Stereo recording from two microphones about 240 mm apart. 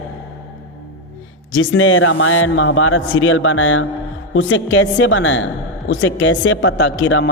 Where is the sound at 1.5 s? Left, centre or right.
Left.